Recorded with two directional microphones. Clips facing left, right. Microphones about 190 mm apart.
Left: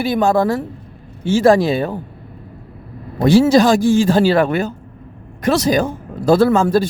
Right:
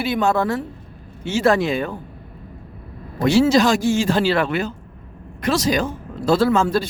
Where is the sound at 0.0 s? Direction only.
30° left (ahead or behind).